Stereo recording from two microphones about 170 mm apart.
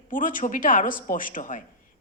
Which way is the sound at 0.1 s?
50° left (ahead or behind).